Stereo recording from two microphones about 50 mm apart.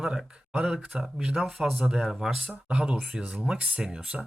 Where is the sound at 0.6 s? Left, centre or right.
Right.